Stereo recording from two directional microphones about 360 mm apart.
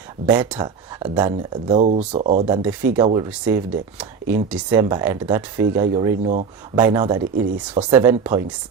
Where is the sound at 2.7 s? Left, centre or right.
Centre.